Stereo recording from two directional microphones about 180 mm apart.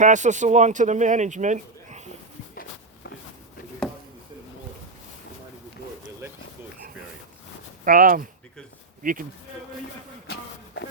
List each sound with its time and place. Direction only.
0.0 s speech: 45° right (ahead or behind)
7.9 s speech: 50° right (ahead or behind)